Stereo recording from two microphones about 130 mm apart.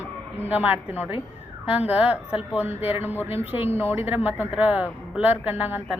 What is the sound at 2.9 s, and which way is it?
Speech, 15° right (ahead or behind).